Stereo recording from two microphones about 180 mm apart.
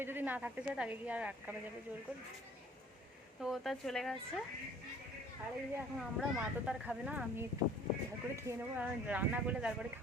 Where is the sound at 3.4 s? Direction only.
Centre (ahead or behind).